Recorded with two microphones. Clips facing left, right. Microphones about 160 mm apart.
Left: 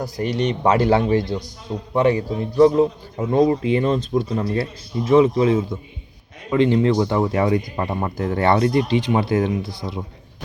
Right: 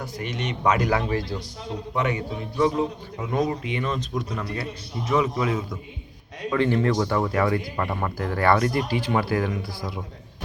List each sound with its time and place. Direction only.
0.0 s speech: 35° left (ahead or behind)